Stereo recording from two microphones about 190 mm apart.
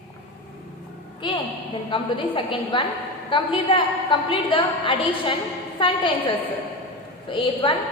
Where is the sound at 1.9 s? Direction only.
25° left (ahead or behind).